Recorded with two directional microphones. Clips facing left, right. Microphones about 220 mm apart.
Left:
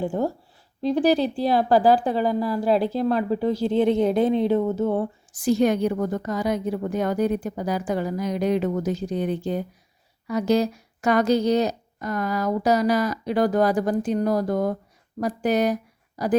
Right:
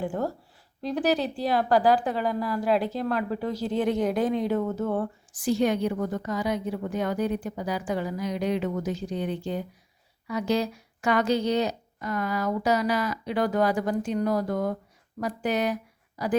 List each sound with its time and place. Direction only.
0.0 s a woman's voice: 25° left (ahead or behind)
5.5 s a woman's voice: 45° left (ahead or behind)